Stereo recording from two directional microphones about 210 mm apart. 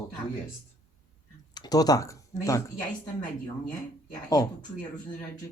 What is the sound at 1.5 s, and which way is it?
Speech, 20° left (ahead or behind).